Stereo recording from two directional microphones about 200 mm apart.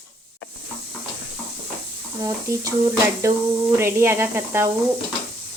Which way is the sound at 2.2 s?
15° right (ahead or behind).